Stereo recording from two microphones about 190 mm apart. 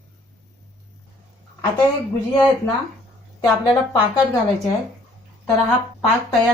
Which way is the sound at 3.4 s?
20° left (ahead or behind).